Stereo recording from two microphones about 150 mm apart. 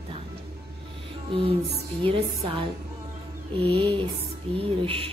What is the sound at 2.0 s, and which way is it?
Music, 35° right (ahead or behind).